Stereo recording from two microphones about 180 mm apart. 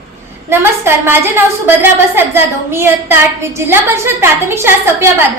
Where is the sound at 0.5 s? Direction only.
15° right (ahead or behind).